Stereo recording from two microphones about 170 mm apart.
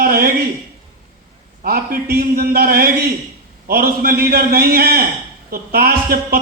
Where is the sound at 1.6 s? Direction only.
65° right (ahead or behind).